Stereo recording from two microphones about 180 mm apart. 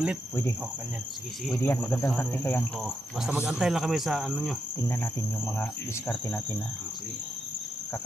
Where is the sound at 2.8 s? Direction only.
5° right (ahead or behind).